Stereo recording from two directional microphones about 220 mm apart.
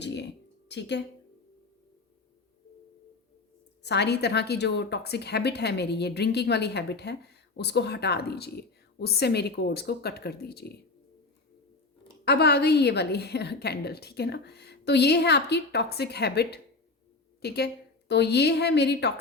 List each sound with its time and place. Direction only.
0.0 s a sound: 50° left (ahead or behind)
0.7 s a woman's voice: 50° left (ahead or behind)
3.8 s a woman's voice: 50° left (ahead or behind)
12.2 s a woman's voice: 45° left (ahead or behind)